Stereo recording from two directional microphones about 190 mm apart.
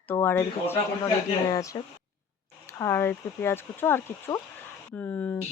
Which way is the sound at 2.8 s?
10° left (ahead or behind).